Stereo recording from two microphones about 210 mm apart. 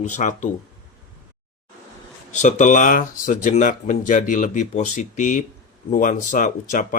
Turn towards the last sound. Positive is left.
turn(degrees=40)  # may be behind; listen again after turning